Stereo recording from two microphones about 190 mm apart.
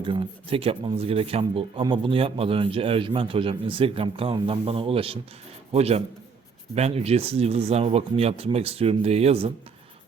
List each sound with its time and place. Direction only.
0.0 s speech: 25° right (ahead or behind)